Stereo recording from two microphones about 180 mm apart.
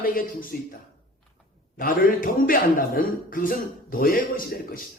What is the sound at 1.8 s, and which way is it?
A man's voice, 50° left (ahead or behind).